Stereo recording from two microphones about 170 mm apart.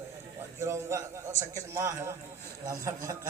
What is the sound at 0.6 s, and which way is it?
A man's voice, 15° right (ahead or behind).